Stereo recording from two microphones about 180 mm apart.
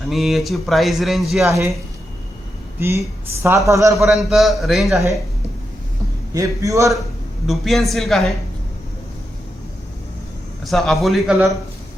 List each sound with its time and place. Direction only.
0.1 s speech: centre (ahead or behind)
1.5 s speech: 15° right (ahead or behind)
2.7 s speech: 15° right (ahead or behind)
4.1 s speech: centre (ahead or behind)
6.3 s speech: 20° right (ahead or behind)
7.4 s speech: centre (ahead or behind)
10.7 s speech: centre (ahead or behind)